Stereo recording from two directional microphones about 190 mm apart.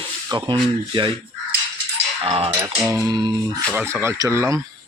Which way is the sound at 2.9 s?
20° right (ahead or behind).